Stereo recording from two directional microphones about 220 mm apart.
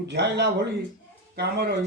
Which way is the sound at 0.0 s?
50° right (ahead or behind).